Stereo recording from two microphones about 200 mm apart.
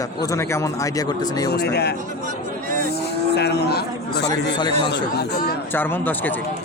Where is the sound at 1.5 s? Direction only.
55° left (ahead or behind).